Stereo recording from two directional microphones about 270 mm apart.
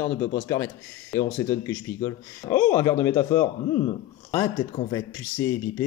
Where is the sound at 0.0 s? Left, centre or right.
Centre.